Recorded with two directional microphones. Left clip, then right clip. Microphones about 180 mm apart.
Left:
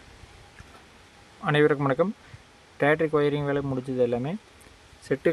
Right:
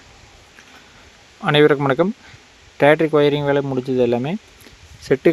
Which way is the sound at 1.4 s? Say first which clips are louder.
Right 8 dB; 30° right (ahead or behind).